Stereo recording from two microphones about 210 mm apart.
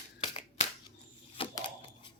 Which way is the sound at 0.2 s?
30° left (ahead or behind).